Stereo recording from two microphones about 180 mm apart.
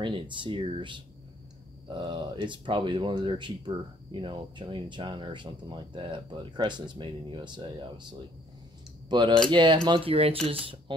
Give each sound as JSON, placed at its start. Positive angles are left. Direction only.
{"t": 0.0, "sound": "speech", "side_deg": -25}